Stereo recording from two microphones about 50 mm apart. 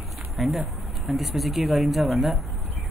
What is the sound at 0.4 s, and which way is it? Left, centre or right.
Speech, centre.